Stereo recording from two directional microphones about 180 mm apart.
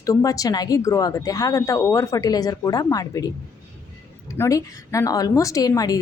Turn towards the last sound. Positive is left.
turn(degrees=20)  # may be behind; listen again after turning